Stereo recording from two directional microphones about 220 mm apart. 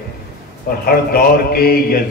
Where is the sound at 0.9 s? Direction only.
45° left (ahead or behind).